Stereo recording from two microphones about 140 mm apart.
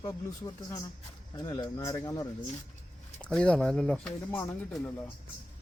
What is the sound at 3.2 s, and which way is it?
Speech, 5° left (ahead or behind).